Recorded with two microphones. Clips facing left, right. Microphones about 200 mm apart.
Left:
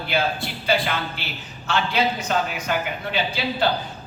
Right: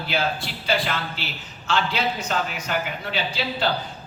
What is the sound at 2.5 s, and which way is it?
Speech, 55° left (ahead or behind).